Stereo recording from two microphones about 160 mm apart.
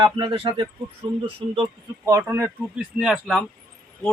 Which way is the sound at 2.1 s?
15° right (ahead or behind).